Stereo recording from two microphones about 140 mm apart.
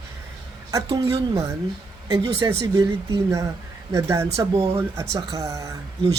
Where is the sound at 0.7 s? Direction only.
25° right (ahead or behind).